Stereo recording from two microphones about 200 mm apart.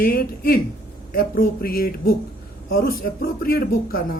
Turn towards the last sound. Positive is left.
turn(degrees=45)  # may be behind; listen again after turning